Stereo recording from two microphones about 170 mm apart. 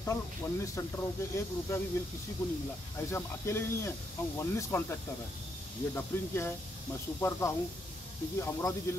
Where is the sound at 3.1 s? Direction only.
15° left (ahead or behind).